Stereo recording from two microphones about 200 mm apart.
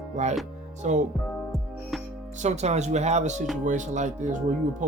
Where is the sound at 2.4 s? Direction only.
35° right (ahead or behind).